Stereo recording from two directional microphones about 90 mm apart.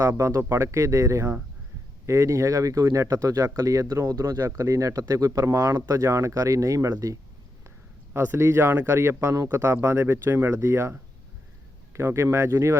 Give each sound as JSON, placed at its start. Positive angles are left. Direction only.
{"t": 0.0, "sound": "speech", "side_deg": -35}
{"t": 8.1, "sound": "speech", "side_deg": -25}
{"t": 11.9, "sound": "speech", "side_deg": -30}